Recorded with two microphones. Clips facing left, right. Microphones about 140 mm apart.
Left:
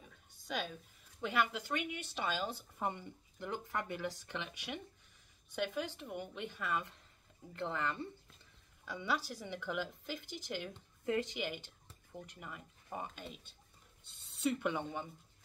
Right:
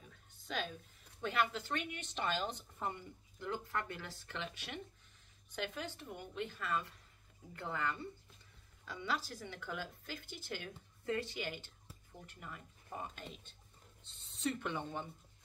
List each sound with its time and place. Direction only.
0.5 s speech: 10° left (ahead or behind)
7.5 s speech: 25° left (ahead or behind)
8.8 s speech: 15° left (ahead or behind)